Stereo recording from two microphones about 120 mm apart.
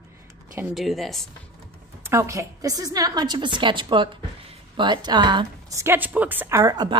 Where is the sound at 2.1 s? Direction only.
25° right (ahead or behind).